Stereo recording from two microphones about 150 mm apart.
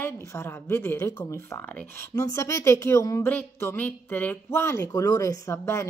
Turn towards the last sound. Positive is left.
turn(degrees=15)  # may be behind; listen again after turning